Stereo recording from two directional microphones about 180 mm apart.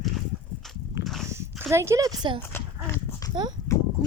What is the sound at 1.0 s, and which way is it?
Dog, centre (ahead or behind).